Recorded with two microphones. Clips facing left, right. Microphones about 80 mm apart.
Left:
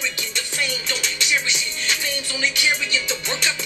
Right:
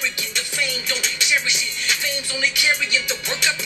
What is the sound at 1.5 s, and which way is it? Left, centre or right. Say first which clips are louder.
Music: even; left.